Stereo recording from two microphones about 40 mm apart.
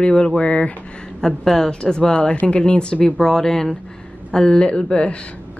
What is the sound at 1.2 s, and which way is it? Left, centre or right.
Speech, centre.